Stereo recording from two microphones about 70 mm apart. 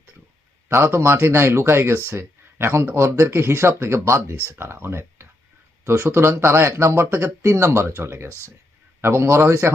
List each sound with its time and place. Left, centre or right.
0.7 s speech: right
6.1 s speech: right